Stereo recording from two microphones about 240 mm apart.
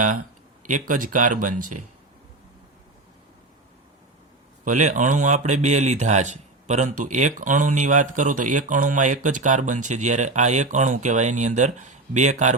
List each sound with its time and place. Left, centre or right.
0.7 s speech: right
4.6 s speech: right